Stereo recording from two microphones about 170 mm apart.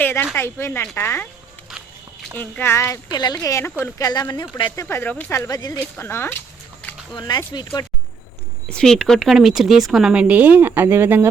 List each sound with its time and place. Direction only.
0.0 s a sound: 10° left (ahead or behind)
0.3 s speech: 15° left (ahead or behind)
2.4 s a woman's voice: 15° left (ahead or behind)
4.9 s speech: 10° left (ahead or behind)
7.2 s a woman's voice: 25° left (ahead or behind)
8.7 s speech: 5° left (ahead or behind); by 11.3 s 15° right (ahead or behind)